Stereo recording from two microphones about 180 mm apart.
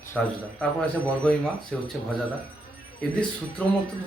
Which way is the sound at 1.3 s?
5° left (ahead or behind).